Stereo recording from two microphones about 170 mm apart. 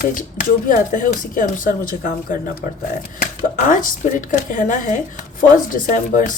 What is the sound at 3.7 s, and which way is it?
Speech, 50° left (ahead or behind).